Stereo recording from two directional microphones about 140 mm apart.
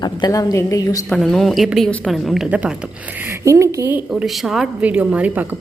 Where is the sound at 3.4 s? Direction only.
20° right (ahead or behind).